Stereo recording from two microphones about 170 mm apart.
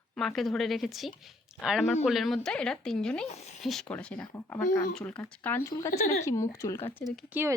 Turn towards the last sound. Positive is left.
turn(degrees=0)  # may be behind; listen again after turning